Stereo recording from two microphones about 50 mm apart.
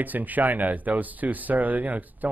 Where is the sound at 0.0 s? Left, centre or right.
Right.